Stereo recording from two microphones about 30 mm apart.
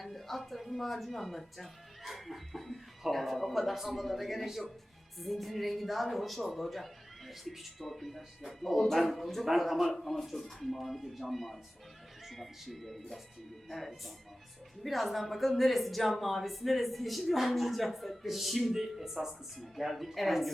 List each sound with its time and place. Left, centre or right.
0.0 s a woman's voice: centre
19.6 s a woman's voice: centre